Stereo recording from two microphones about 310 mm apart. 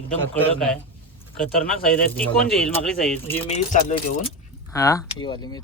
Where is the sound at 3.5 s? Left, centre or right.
Left.